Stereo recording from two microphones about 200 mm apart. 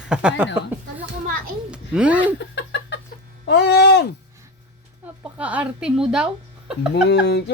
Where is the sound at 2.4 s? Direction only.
60° left (ahead or behind).